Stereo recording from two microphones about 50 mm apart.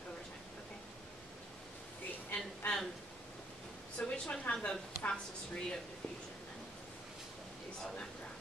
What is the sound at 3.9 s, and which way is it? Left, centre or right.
Speech, centre.